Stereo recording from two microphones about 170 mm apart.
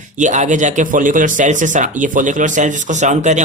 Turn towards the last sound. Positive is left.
turn(degrees=-45)  # may be behind; listen again after turning